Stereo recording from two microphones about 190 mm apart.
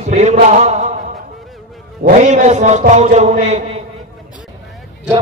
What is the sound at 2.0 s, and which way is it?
A man's voice, 40° right (ahead or behind).